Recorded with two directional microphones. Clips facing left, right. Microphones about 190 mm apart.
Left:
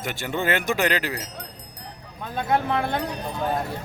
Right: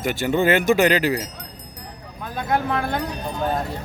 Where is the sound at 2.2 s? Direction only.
25° left (ahead or behind).